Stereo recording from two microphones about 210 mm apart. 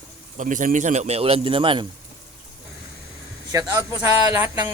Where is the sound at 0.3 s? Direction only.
35° right (ahead or behind).